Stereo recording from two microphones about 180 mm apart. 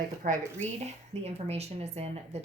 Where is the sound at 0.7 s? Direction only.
35° right (ahead or behind).